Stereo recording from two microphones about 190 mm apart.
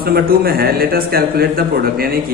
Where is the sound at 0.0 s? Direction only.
55° right (ahead or behind).